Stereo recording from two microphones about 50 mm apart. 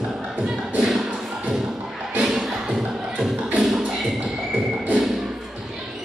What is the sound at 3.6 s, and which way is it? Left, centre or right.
Beatboxing, centre.